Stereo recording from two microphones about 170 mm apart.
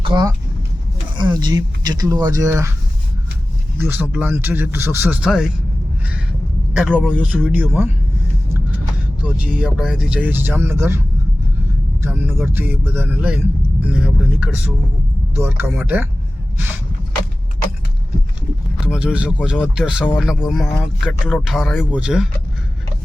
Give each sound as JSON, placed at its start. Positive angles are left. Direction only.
{"t": 0.0, "sound": "speech", "side_deg": -25}
{"t": 3.8, "sound": "speech", "side_deg": -10}
{"t": 6.9, "sound": "speech", "side_deg": -5}
{"t": 9.2, "sound": "speech", "side_deg": -5}
{"t": 12.0, "sound": "speech", "side_deg": -10}
{"t": 18.8, "sound": "speech", "side_deg": -5}